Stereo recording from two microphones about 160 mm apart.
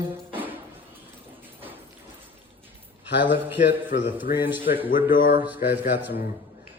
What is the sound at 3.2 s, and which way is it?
Speech, 10° right (ahead or behind).